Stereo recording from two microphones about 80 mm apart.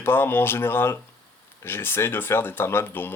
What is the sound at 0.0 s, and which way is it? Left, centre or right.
Speech, left.